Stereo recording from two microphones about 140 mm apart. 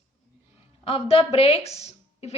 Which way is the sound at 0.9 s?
45° left (ahead or behind).